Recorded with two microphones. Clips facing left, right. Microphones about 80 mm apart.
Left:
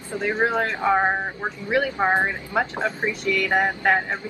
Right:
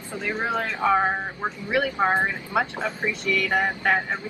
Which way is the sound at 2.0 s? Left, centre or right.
Left.